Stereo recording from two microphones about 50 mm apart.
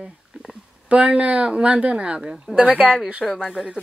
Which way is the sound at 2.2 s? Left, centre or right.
Centre.